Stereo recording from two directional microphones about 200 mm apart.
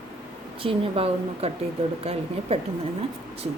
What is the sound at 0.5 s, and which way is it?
Speech, 25° right (ahead or behind).